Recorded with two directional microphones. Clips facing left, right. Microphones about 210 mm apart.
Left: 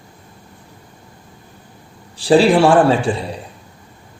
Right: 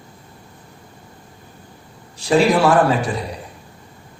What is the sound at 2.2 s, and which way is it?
A man's voice, 30° left (ahead or behind).